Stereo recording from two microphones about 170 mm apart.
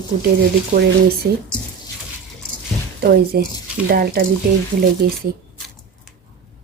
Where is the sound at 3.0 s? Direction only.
65° right (ahead or behind).